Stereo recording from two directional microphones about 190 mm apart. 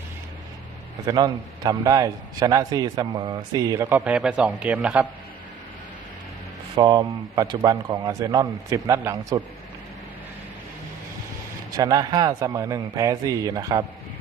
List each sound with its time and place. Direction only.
1.0 s a man's voice: 20° right (ahead or behind)
6.7 s a man's voice: 20° right (ahead or behind)
11.8 s a man's voice: 20° right (ahead or behind)